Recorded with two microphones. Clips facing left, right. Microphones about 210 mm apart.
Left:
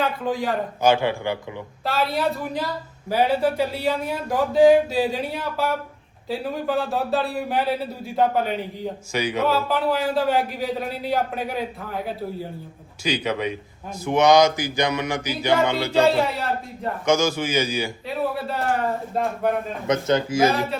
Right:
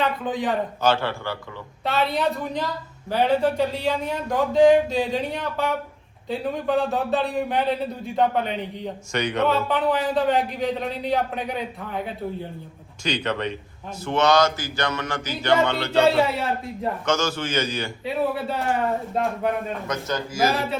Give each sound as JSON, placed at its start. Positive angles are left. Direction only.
{"t": 0.0, "sound": "a man's voice", "side_deg": 0}
{"t": 0.8, "sound": "speech", "side_deg": 15}
{"t": 1.8, "sound": "a man's voice", "side_deg": 0}
{"t": 17.1, "sound": "a man's voice", "side_deg": 10}
{"t": 19.9, "sound": "speech", "side_deg": 20}
{"t": 20.4, "sound": "a man's voice", "side_deg": 0}